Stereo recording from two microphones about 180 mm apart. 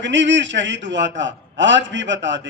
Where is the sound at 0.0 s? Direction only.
90° right.